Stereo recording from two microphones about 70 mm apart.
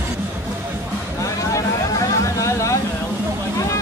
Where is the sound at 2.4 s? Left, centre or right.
Left.